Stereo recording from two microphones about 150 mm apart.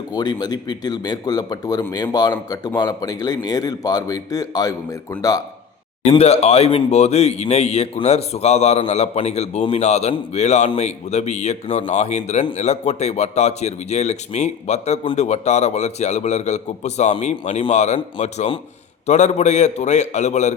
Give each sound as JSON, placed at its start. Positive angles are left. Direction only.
{"t": 0.1, "sound": "speech", "side_deg": 25}
{"t": 6.1, "sound": "speech", "side_deg": 45}